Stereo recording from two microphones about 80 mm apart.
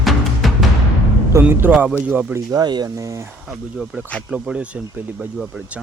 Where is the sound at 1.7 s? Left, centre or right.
Centre.